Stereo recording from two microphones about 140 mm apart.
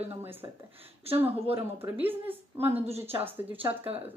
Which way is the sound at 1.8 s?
15° right (ahead or behind).